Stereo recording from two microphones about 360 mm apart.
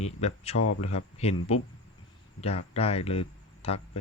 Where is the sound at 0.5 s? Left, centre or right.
Left.